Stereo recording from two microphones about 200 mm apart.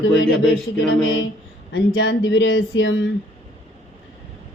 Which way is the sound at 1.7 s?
70° left (ahead or behind).